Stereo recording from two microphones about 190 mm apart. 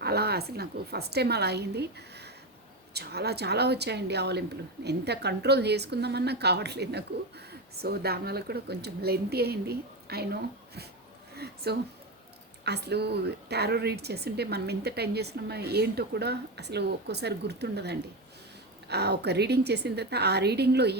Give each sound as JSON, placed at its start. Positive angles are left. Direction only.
{"t": 0.0, "sound": "a woman's voice", "side_deg": -60}
{"t": 11.3, "sound": "a sound", "side_deg": -55}
{"t": 12.6, "sound": "a woman's voice", "side_deg": -60}